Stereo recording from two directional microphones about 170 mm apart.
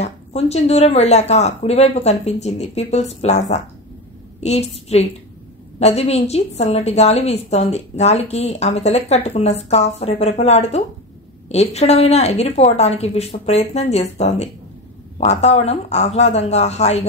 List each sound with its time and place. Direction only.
0.0 s a woman's voice: 40° left (ahead or behind)